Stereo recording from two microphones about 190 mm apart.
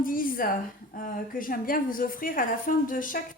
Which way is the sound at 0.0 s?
45° left (ahead or behind).